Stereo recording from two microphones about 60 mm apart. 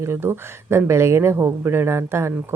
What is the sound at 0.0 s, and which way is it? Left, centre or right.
Speech, right.